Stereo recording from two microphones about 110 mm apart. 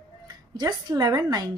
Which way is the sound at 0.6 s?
40° right (ahead or behind).